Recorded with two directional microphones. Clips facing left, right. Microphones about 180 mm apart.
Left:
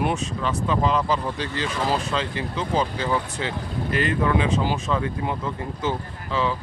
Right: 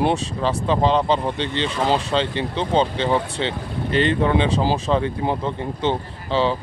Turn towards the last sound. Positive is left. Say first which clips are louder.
# right 4 dB
turn(degrees=-30)  # may be behind; listen again after turning